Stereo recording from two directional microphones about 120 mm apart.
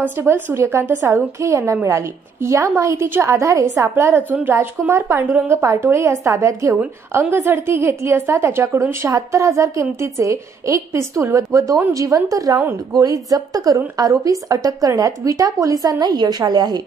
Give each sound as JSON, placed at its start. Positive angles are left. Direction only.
{"t": 0.0, "sound": "a woman's voice", "side_deg": -20}